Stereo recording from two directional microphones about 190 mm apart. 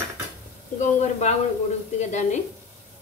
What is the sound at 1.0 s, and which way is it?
Speech, 35° left (ahead or behind).